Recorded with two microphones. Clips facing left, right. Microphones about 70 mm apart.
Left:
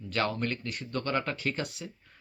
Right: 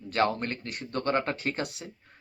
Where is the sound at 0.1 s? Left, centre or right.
Right.